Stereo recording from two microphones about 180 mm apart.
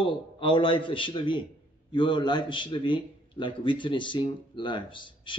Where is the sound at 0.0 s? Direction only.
25° left (ahead or behind).